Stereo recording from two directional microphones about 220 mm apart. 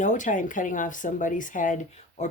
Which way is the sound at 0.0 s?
35° left (ahead or behind).